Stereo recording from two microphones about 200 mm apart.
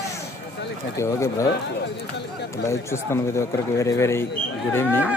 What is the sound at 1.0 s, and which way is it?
Speech, 15° left (ahead or behind).